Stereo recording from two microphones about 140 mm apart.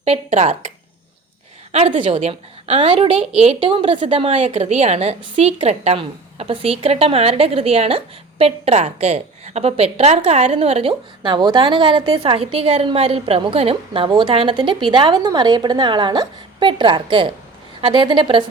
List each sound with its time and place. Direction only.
0.0 s a woman's voice: 55° right (ahead or behind)
1.7 s a woman's voice: 50° right (ahead or behind)
11.2 s a woman's voice: 35° right (ahead or behind)